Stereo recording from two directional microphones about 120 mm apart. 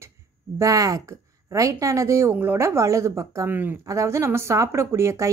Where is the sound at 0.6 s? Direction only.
30° right (ahead or behind).